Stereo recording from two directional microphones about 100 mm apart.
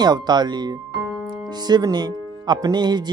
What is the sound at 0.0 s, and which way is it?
Speech, 45° right (ahead or behind).